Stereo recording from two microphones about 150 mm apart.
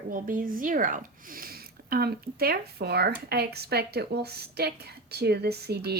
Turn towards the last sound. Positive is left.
turn(degrees=-90)